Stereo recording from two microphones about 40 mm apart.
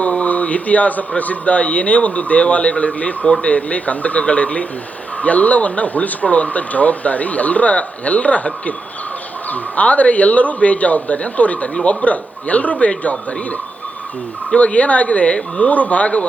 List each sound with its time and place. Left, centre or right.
0.0 s a sound: left
1.2 s speech: left
15.7 s speech: left